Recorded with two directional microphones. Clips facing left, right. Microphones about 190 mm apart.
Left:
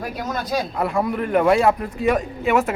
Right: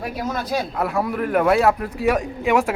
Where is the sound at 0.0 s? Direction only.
5° right (ahead or behind).